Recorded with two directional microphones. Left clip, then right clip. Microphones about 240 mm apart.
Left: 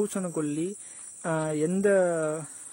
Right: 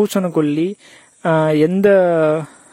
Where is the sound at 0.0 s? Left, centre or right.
Right.